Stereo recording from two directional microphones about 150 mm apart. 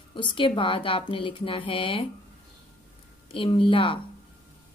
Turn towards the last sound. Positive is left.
turn(degrees=35)  # may be behind; listen again after turning